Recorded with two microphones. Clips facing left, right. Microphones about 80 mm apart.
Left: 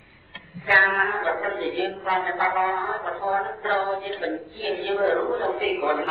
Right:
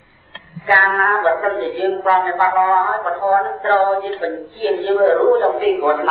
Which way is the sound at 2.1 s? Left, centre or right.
Right.